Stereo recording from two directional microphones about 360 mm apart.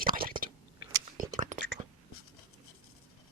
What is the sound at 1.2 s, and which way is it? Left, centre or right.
Whispering, right.